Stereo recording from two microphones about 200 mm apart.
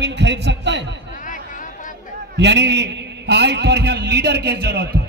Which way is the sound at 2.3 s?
60° right (ahead or behind).